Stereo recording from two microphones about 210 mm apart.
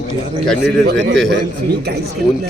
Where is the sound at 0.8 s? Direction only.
55° right (ahead or behind).